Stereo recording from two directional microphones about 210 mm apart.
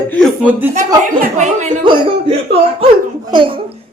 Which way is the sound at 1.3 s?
35° right (ahead or behind).